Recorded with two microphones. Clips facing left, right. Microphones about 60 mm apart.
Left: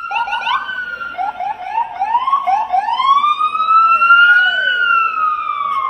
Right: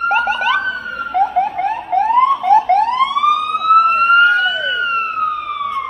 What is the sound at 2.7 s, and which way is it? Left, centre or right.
Police car, right.